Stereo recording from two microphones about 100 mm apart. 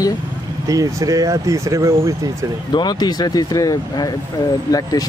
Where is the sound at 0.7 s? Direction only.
35° right (ahead or behind).